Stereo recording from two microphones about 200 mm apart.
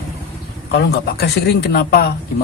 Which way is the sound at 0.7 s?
55° left (ahead or behind).